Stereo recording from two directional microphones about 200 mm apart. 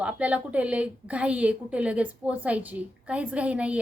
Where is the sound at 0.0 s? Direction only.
5° right (ahead or behind).